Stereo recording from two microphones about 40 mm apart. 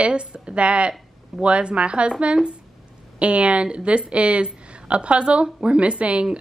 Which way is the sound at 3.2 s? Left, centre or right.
Right.